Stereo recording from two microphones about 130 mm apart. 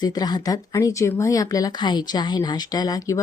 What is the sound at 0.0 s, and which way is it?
Speech, 30° left (ahead or behind).